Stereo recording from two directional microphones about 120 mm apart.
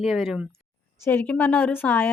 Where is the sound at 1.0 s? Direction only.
15° left (ahead or behind).